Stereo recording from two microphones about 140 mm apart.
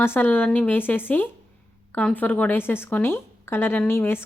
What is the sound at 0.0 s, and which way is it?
A woman's voice, 15° left (ahead or behind).